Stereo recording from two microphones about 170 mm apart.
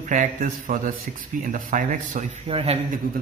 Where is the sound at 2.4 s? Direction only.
35° right (ahead or behind).